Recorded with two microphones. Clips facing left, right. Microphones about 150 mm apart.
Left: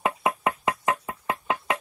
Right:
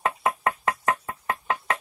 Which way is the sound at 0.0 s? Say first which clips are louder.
Even; 15° left (ahead or behind).